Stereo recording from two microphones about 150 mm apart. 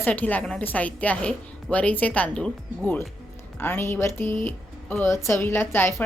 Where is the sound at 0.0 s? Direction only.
10° left (ahead or behind).